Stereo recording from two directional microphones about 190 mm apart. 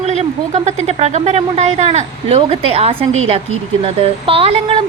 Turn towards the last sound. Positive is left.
turn(degrees=-30)  # may be behind; listen again after turning